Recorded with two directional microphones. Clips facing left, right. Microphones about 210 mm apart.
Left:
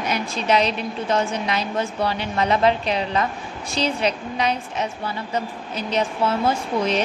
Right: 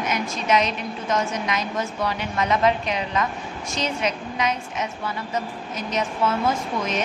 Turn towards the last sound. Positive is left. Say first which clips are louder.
# left 4 dB
turn(degrees=30)  # may be behind; listen again after turning